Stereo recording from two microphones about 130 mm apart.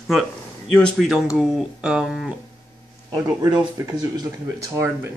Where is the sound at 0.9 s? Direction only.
Centre (ahead or behind).